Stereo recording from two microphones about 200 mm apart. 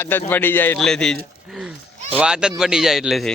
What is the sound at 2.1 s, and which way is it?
Speech, 5° right (ahead or behind).